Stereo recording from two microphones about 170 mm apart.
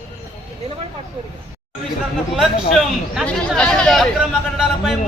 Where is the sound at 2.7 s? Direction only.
Centre (ahead or behind).